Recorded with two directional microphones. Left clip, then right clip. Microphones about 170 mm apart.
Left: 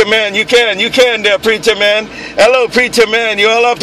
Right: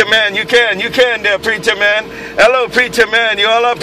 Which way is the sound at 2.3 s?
35° left (ahead or behind).